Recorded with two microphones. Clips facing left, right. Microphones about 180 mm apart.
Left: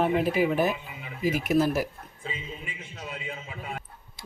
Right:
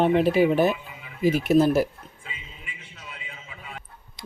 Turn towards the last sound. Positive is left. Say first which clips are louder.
# left 4 dB
turn(degrees=45)  # may be behind; listen again after turning